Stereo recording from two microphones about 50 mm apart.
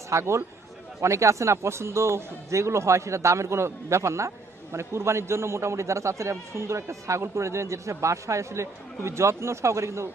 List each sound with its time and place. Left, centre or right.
0.1 s a man's voice: right
1.0 s a man's voice: right
9.0 s a man's voice: right